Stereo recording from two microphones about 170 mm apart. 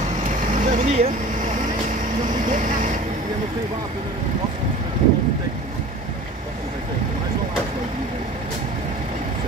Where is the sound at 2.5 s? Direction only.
45° right (ahead or behind).